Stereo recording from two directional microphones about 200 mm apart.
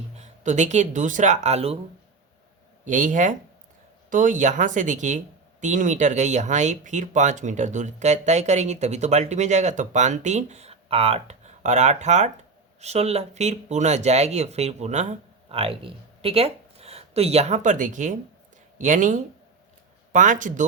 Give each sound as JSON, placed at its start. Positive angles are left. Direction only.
{"t": 0.2, "sound": "speech", "side_deg": -35}
{"t": 2.8, "sound": "speech", "side_deg": -40}